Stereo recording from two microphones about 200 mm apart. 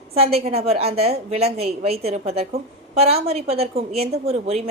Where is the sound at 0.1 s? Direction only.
30° right (ahead or behind).